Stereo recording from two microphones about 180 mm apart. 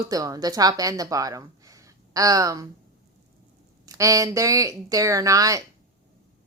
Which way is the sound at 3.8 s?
20° right (ahead or behind).